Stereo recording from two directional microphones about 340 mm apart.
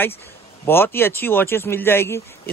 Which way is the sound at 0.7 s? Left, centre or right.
Centre.